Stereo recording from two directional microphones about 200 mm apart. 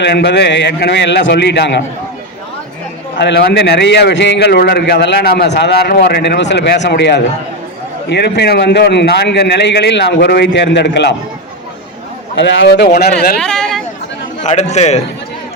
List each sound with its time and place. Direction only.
0.0 s a man's voice: 60° left (ahead or behind)
3.2 s a man's voice: 55° left (ahead or behind)
12.4 s a man's voice: 65° left (ahead or behind)
13.4 s a sound: 5° left (ahead or behind)
14.4 s a man's voice: 35° left (ahead or behind)